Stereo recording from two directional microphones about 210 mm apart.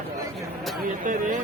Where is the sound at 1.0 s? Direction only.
40° right (ahead or behind).